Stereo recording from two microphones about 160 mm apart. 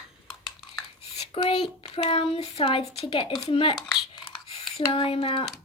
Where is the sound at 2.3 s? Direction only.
35° left (ahead or behind).